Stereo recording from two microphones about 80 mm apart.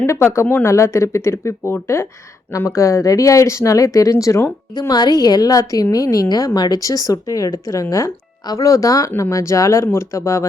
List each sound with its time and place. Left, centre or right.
0.2 s a woman's voice: left
4.7 s a woman's voice: left